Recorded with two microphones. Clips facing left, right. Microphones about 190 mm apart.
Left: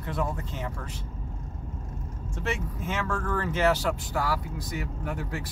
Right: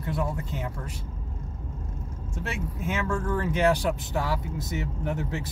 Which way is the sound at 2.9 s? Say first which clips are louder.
Right 2 dB; 10° right (ahead or behind).